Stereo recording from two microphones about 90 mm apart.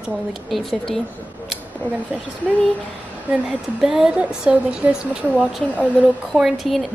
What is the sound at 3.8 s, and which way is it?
Speech, 5° right (ahead or behind).